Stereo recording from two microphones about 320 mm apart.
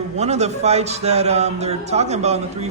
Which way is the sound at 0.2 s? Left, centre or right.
Right.